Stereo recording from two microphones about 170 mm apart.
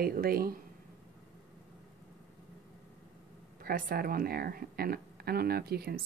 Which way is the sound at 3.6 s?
60° right (ahead or behind).